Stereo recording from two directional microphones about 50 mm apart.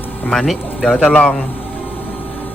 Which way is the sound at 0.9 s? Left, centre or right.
Left.